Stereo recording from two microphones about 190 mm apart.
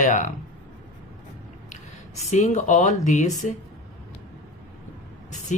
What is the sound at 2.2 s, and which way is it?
Speech, 35° left (ahead or behind).